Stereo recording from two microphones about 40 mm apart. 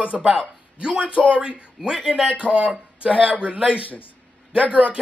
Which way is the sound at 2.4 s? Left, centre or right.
Right.